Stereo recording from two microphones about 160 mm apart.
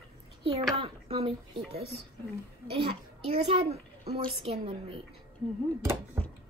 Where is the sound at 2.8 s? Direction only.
35° right (ahead or behind).